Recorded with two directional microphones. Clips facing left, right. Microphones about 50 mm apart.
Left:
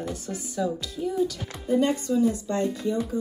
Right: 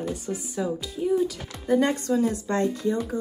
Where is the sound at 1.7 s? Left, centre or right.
Right.